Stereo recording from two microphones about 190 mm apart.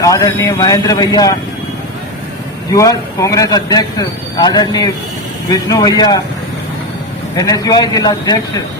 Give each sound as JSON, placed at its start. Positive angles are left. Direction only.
{"t": 0.0, "sound": "a man's voice", "side_deg": 15}
{"t": 2.7, "sound": "a man's voice", "side_deg": 15}
{"t": 7.3, "sound": "a man's voice", "side_deg": 20}